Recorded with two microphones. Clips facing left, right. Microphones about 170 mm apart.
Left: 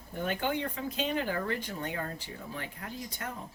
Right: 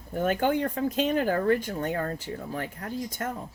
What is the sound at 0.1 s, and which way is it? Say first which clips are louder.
Speech: right 7 dB; 45° right (ahead or behind).